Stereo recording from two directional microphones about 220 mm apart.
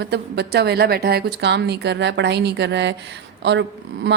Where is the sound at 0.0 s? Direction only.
50° right (ahead or behind).